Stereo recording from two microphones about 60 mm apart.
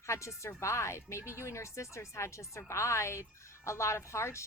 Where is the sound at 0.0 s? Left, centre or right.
Left.